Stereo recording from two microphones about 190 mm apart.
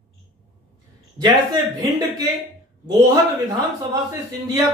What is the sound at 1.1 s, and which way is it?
Speech, 20° right (ahead or behind).